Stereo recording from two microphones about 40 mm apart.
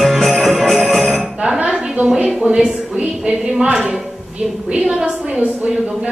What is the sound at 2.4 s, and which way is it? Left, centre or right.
Speech, centre.